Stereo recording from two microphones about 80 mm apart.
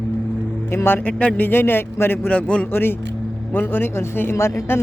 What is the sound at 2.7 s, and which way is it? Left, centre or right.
Speech, left.